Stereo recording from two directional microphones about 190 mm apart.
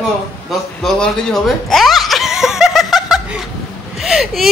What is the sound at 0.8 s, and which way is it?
Chuckle, 5° left (ahead or behind).